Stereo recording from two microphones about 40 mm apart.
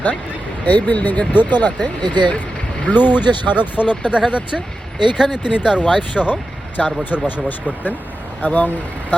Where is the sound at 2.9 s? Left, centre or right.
Left.